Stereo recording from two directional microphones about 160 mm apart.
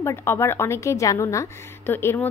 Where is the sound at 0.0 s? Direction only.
15° left (ahead or behind).